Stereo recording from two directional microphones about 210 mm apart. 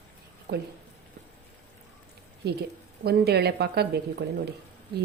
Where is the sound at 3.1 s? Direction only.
50° right (ahead or behind).